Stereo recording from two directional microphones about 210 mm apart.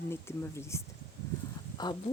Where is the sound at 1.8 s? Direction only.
20° left (ahead or behind).